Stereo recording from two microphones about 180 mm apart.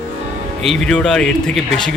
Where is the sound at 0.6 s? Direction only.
5° left (ahead or behind).